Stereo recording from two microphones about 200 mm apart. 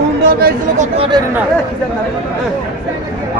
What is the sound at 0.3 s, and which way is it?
Speech, 45° right (ahead or behind).